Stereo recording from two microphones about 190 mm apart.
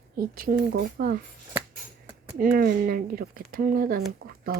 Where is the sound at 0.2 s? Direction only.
50° right (ahead or behind).